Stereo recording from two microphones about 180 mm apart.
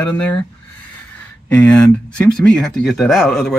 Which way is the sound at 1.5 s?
5° left (ahead or behind).